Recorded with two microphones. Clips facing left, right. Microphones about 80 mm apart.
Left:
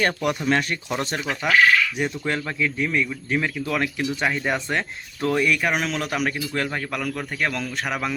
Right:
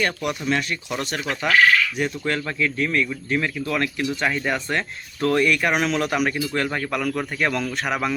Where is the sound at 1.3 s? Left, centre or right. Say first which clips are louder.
Right 1 dB; centre.